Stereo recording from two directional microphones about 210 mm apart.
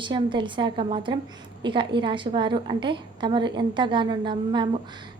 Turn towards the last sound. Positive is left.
turn(degrees=-20)  # may be behind; listen again after turning